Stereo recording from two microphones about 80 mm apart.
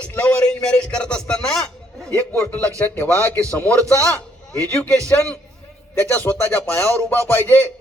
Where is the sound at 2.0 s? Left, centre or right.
Right.